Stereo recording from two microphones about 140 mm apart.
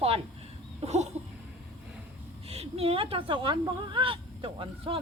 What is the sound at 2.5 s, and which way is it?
Speech, 45° right (ahead or behind).